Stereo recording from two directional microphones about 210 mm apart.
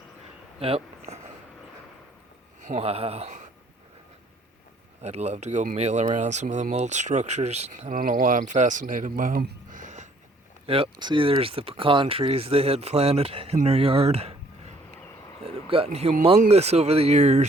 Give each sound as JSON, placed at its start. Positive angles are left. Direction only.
{"t": 0.6, "sound": "speech", "side_deg": -30}
{"t": 2.6, "sound": "speech", "side_deg": -35}
{"t": 5.0, "sound": "speech", "side_deg": -30}
{"t": 10.7, "sound": "speech", "side_deg": -25}
{"t": 15.4, "sound": "speech", "side_deg": -25}